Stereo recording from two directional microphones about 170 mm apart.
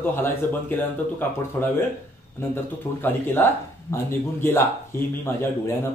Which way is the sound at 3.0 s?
15° left (ahead or behind).